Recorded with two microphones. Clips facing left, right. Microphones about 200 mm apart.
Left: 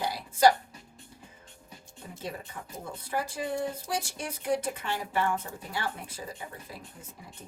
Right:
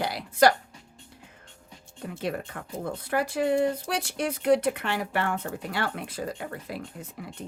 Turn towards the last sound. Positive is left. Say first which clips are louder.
# right 8 dB
turn(degrees=-70)  # may be behind; listen again after turning